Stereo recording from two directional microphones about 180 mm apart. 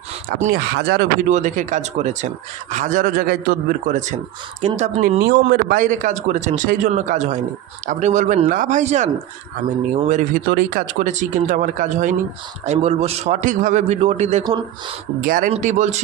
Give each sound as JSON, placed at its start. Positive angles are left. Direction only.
{"t": 0.3, "sound": "speech", "side_deg": -40}
{"t": 0.5, "sound": "speech", "side_deg": -60}
{"t": 1.3, "sound": "a man's voice", "side_deg": -45}
{"t": 5.5, "sound": "a man's voice", "side_deg": -55}
{"t": 15.2, "sound": "speech", "side_deg": -50}
{"t": 15.4, "sound": "a man's voice", "side_deg": -40}